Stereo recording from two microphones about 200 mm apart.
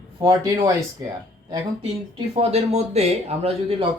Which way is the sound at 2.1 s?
30° right (ahead or behind).